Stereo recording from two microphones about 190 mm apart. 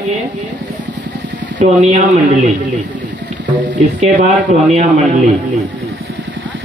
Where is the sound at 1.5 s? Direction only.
40° right (ahead or behind).